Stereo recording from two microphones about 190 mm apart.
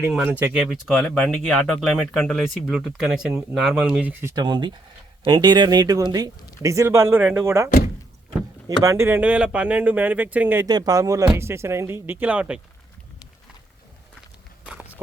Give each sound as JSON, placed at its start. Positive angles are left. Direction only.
{"t": 0.1, "sound": "speech", "side_deg": -5}
{"t": 4.2, "sound": "speech", "side_deg": -20}
{"t": 8.8, "sound": "speech", "side_deg": -15}
{"t": 10.7, "sound": "speech", "side_deg": -20}
{"t": 14.7, "sound": "walk", "side_deg": -5}